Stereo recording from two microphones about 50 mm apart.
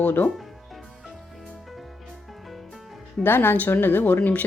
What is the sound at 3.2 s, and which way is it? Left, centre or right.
A woman's voice, left.